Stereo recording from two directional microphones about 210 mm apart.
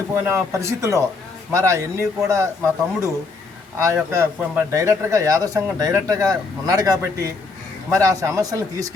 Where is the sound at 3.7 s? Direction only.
10° right (ahead or behind).